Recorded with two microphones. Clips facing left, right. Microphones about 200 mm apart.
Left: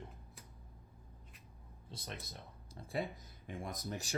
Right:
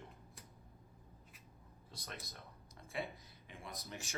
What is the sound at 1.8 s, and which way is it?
Speech, 25° left (ahead or behind).